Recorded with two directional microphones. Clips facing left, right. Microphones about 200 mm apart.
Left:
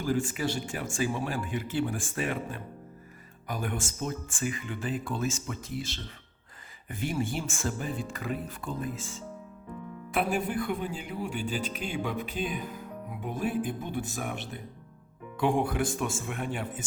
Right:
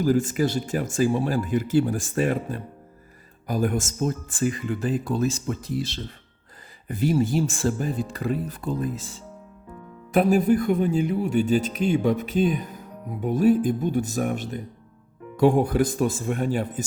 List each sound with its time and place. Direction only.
0.0 s speech: 40° right (ahead or behind)
15.6 s speech: 40° right (ahead or behind)